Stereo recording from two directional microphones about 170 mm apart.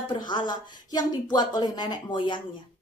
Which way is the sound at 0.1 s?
25° left (ahead or behind).